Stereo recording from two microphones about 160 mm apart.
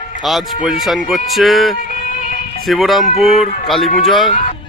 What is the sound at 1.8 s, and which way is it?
Music, 55° left (ahead or behind).